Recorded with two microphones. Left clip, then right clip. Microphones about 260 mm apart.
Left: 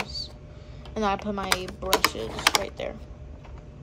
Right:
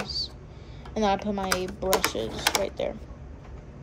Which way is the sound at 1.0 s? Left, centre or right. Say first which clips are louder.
Right 1 dB; centre.